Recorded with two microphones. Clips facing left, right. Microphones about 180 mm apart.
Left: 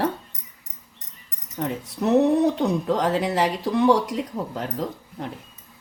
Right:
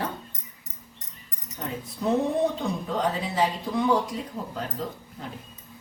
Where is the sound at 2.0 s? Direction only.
75° left (ahead or behind); by 4.6 s 90° left.